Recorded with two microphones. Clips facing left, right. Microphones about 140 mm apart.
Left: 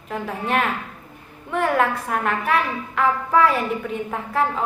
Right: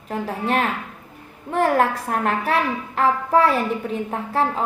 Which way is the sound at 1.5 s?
35° right (ahead or behind).